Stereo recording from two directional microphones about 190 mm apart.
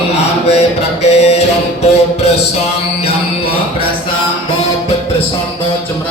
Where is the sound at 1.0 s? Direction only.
35° left (ahead or behind).